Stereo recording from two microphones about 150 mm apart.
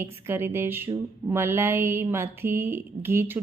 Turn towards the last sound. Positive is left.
turn(degrees=-15)  # may be behind; listen again after turning